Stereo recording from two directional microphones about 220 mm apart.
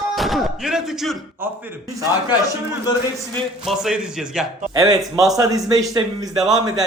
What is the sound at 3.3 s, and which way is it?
Speech, centre (ahead or behind).